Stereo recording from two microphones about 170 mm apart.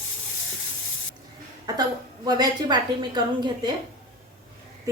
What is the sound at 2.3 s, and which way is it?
A woman's voice, 25° right (ahead or behind).